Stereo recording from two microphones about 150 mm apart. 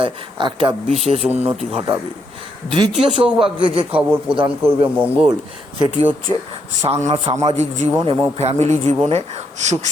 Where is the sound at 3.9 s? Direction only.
10° right (ahead or behind).